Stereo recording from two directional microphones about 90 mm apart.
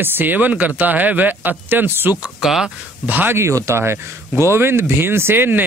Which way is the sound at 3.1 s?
20° right (ahead or behind).